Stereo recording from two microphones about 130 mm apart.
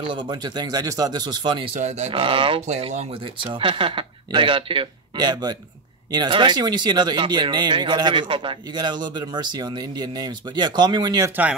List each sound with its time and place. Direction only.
0.0 s speech: 40° right (ahead or behind)
1.8 s speech: 60° right (ahead or behind)
2.1 s speech: 40° right (ahead or behind)
2.6 s speech: 55° right (ahead or behind)
3.4 s speech: 40° right (ahead or behind)